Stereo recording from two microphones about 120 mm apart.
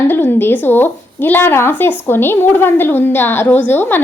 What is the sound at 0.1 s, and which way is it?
Speech, 15° left (ahead or behind).